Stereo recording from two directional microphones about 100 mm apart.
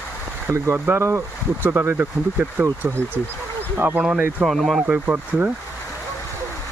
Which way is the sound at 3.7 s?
15° right (ahead or behind).